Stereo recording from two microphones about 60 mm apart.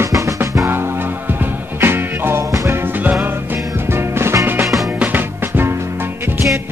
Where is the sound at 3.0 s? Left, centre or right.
Right.